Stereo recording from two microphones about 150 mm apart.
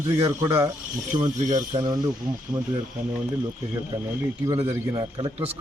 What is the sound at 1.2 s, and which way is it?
Speech, 55° right (ahead or behind).